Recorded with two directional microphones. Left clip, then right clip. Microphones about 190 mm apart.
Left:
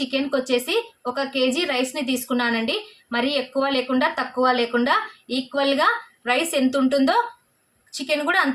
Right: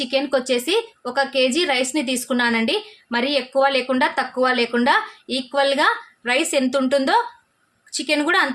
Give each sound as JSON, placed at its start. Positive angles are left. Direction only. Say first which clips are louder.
{"t": 0.0, "sound": "a woman's voice", "louder": "right 3 dB", "side_deg": -30}